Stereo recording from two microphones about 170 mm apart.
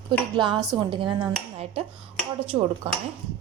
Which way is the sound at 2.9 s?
35° right (ahead or behind).